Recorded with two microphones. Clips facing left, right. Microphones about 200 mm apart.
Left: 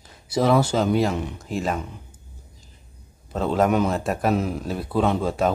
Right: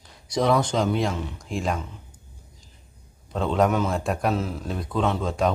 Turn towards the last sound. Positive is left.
turn(degrees=5)  # may be behind; listen again after turning